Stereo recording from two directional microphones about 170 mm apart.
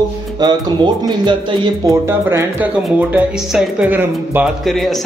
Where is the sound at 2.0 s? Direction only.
15° right (ahead or behind).